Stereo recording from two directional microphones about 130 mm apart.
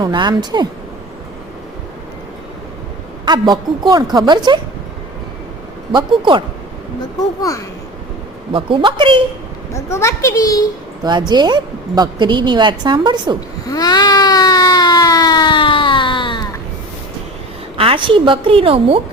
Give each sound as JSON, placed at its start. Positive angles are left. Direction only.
{"t": 0.0, "sound": "a woman's voice", "side_deg": -35}
{"t": 3.2, "sound": "a woman's voice", "side_deg": -35}
{"t": 5.9, "sound": "a woman's voice", "side_deg": -40}
{"t": 8.5, "sound": "a woman's voice", "side_deg": -40}
{"t": 9.7, "sound": "a child's voice", "side_deg": 20}
{"t": 11.0, "sound": "a woman's voice", "side_deg": -35}
{"t": 13.7, "sound": "a sound", "side_deg": 30}
{"t": 17.7, "sound": "a woman's voice", "side_deg": -45}